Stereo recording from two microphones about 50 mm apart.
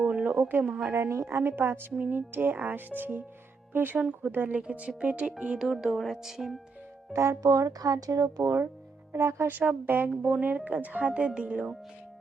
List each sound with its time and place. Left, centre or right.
0.0 s a sound: right
0.3 s a woman's voice: right
0.9 s a woman's voice: right
2.0 s a woman's voice: right
4.5 s speech: right
6.0 s speech: centre
7.1 s speech: right
9.1 s speech: right
9.5 s speech: right; by 11.8 s centre